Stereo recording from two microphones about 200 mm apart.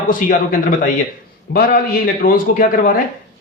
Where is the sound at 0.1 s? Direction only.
40° left (ahead or behind).